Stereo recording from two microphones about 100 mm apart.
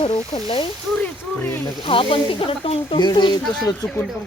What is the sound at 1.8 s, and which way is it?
Speech, 60° left (ahead or behind).